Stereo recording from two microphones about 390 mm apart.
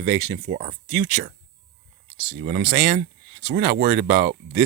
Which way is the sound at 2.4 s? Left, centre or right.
Right.